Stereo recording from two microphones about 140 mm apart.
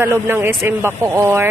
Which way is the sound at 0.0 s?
15° right (ahead or behind).